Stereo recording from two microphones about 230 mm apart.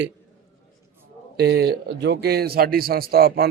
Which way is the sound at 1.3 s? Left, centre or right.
Right.